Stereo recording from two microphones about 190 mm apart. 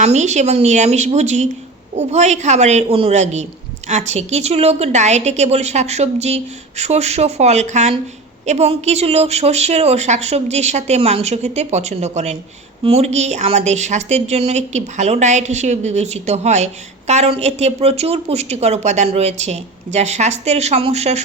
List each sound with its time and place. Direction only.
0.0 s a woman's voice: 35° right (ahead or behind)